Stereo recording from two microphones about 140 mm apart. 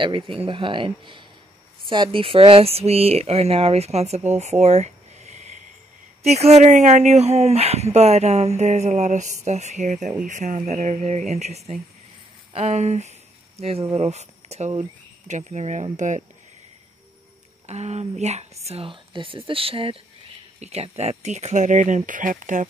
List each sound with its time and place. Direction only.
0.0 s speech: 40° right (ahead or behind); by 16.2 s 60° right (ahead or behind)
17.6 s speech: 50° right (ahead or behind)